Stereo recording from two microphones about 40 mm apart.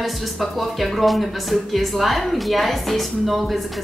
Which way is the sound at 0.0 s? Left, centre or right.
Centre.